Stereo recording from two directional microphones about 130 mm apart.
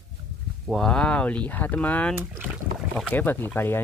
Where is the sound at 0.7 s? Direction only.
5° left (ahead or behind).